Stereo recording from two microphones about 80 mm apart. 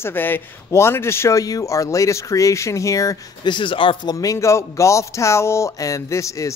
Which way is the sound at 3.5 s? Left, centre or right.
Left.